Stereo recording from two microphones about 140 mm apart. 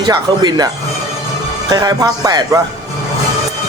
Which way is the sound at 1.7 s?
25° right (ahead or behind).